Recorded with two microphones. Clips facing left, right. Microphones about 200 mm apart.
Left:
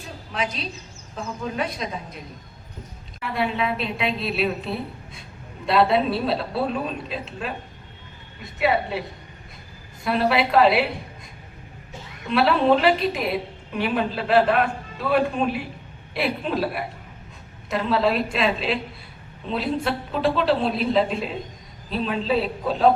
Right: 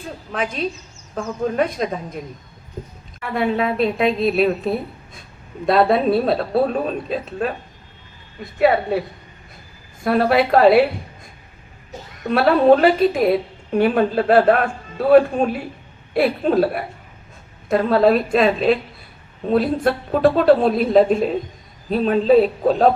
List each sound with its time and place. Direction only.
0.3 s a woman's voice: 50° right (ahead or behind)
8.5 s a woman's voice: 45° right (ahead or behind)
12.2 s a woman's voice: 45° right (ahead or behind)